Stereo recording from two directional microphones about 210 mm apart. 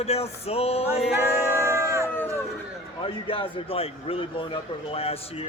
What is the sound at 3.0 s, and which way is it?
Speech, 25° left (ahead or behind).